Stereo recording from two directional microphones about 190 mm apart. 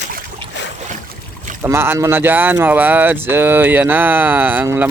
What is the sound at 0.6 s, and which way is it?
Boat, 65° left (ahead or behind).